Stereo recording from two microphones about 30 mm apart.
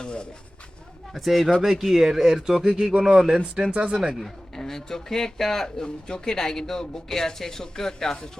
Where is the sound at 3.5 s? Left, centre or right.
Right.